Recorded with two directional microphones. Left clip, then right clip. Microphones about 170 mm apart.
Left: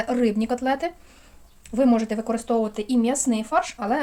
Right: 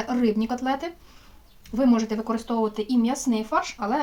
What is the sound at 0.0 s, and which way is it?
A woman's voice, 35° left (ahead or behind).